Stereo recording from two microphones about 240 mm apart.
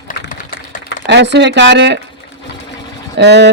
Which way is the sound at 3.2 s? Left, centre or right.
Right.